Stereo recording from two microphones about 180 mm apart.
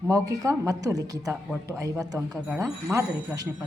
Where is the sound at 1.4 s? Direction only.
5° right (ahead or behind).